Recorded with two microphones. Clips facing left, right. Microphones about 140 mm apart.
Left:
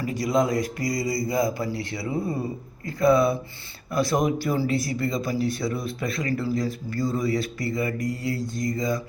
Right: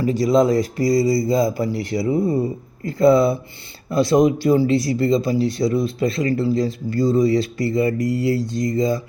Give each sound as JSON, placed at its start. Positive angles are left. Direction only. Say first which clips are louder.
{"t": 0.0, "sound": "speech", "louder": "right 7 dB", "side_deg": -25}